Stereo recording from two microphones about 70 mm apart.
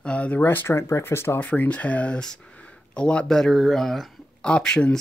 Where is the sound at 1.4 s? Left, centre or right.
Left.